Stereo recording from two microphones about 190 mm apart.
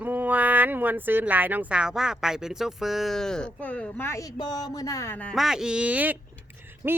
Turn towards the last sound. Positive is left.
turn(degrees=-10)  # may be behind; listen again after turning